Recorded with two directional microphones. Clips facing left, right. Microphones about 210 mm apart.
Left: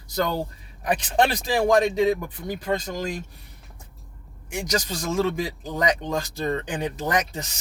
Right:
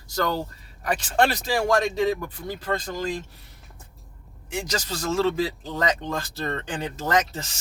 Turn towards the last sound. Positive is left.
turn(degrees=15)  # may be behind; listen again after turning